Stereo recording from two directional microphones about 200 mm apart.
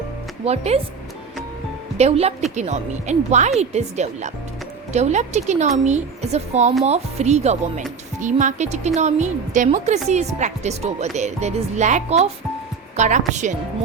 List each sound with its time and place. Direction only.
0.4 s speech: 30° right (ahead or behind)
2.0 s speech: 30° right (ahead or behind)